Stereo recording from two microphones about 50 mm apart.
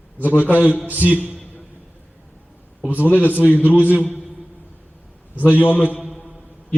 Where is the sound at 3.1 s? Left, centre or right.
Left.